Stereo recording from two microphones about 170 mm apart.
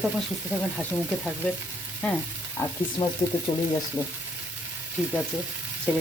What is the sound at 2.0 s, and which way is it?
Speech, 10° left (ahead or behind).